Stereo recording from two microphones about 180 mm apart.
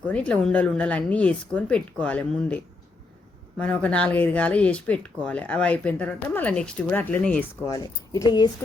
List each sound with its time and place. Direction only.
0.0 s speech: 5° left (ahead or behind)
3.6 s speech: 5° left (ahead or behind)
7.7 s a woman's voice: 20° left (ahead or behind)